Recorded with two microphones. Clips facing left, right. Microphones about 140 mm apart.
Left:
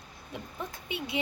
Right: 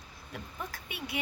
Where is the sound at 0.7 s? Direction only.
20° left (ahead or behind).